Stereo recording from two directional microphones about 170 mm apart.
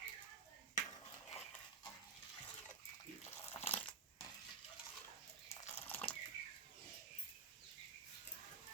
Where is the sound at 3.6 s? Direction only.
10° left (ahead or behind).